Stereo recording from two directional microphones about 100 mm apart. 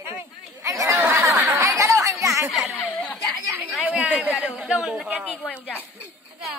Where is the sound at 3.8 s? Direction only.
15° right (ahead or behind).